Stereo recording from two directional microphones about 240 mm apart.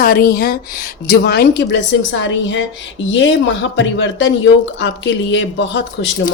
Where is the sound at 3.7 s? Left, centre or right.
Left.